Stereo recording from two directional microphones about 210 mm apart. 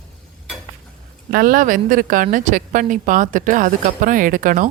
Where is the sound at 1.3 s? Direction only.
45° right (ahead or behind).